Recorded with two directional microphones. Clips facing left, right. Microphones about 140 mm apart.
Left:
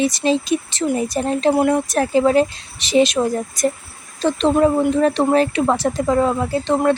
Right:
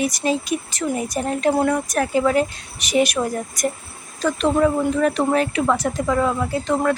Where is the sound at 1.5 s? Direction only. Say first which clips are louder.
Left 3 dB; 15° left (ahead or behind).